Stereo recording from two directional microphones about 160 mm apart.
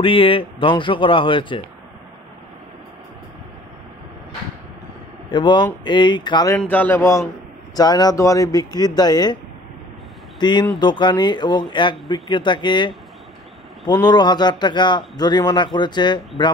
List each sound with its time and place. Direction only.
0.0 s speech: 35° left (ahead or behind)
5.3 s speech: 30° left (ahead or behind)
6.6 s speech: 10° left (ahead or behind); by 9.4 s 25° left (ahead or behind)
10.4 s speech: 25° left (ahead or behind)